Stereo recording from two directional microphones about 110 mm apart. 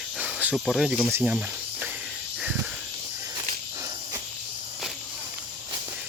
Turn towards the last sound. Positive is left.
turn(degrees=-25)  # may be behind; listen again after turning